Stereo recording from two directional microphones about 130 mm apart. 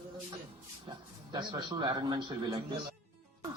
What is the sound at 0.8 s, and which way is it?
Speech, 35° right (ahead or behind).